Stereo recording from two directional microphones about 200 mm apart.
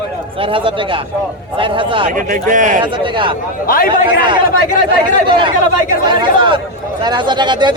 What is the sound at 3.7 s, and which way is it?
Speech, 45° left (ahead or behind).